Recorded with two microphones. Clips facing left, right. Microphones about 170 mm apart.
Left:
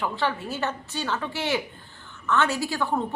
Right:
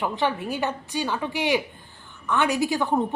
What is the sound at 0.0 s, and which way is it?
Speech, 15° right (ahead or behind).